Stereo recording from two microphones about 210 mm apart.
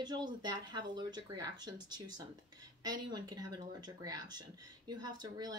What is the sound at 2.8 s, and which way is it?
Speech, 20° right (ahead or behind).